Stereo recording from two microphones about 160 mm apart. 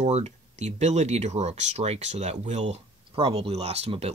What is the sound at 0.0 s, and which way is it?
Speech, 45° right (ahead or behind).